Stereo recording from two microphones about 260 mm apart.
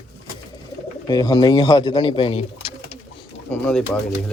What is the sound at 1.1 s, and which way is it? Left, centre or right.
Speech, centre.